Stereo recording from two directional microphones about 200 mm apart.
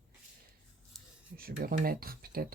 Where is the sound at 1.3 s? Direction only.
50° right (ahead or behind).